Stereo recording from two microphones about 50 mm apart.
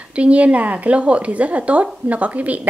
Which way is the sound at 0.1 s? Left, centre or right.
Right.